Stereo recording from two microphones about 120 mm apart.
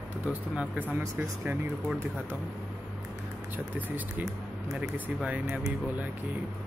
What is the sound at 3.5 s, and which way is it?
Speech, 15° right (ahead or behind).